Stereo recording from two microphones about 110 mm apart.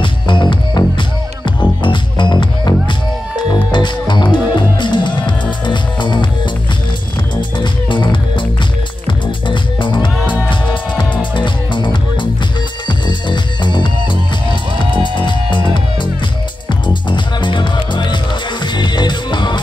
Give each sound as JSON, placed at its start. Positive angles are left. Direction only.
{"t": 0.0, "sound": "music", "side_deg": 50}
{"t": 7.5, "sound": "music", "side_deg": 45}